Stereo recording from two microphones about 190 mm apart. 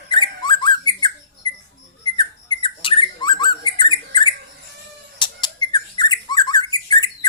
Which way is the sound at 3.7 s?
25° left (ahead or behind).